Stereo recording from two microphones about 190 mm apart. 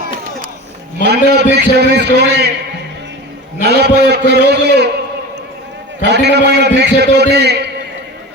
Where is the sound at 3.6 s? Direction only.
60° right (ahead or behind).